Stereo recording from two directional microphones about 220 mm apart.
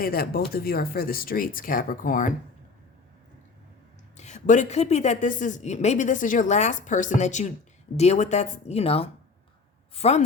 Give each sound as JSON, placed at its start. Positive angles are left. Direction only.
{"t": 0.0, "sound": "a woman's voice", "side_deg": 45}
{"t": 4.2, "sound": "a woman's voice", "side_deg": 30}